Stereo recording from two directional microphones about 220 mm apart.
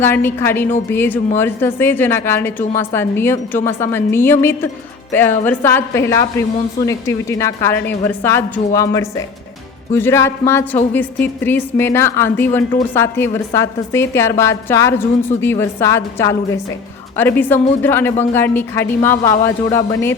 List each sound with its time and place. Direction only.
0.0 s a woman's voice: 10° left (ahead or behind)